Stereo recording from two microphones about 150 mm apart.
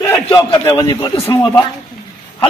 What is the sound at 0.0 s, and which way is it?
A man's voice, 20° left (ahead or behind).